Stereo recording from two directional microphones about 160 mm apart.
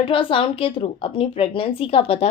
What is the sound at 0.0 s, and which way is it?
A woman's voice, 35° left (ahead or behind).